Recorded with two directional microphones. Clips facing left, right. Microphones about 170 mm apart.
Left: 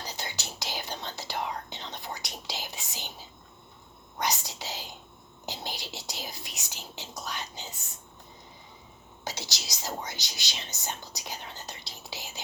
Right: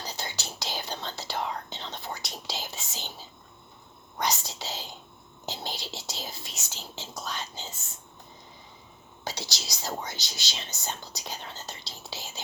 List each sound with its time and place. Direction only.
0.0 s whispering: 20° left (ahead or behind)
4.2 s whispering: 20° left (ahead or behind)
9.2 s whispering: 20° left (ahead or behind)
9.6 s speech: 20° left (ahead or behind)